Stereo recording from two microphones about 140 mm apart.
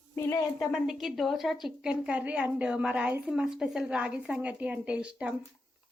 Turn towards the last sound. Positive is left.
turn(degrees=-10)  # may be behind; listen again after turning